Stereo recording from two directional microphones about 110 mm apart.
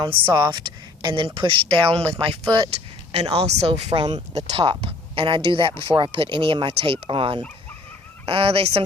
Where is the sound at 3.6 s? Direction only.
65° right (ahead or behind).